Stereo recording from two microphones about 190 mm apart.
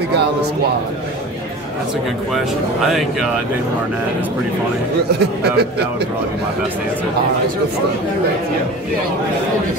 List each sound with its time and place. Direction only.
2.3 s speech: centre (ahead or behind)
5.4 s speech: 60° right (ahead or behind)